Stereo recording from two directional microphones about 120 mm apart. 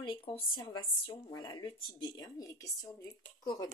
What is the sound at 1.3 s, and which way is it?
Speech, 35° left (ahead or behind).